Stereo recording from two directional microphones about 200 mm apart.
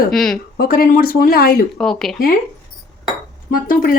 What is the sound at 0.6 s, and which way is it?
A woman's voice, 45° left (ahead or behind).